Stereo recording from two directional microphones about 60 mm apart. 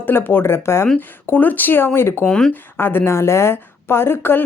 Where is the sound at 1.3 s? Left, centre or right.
Left.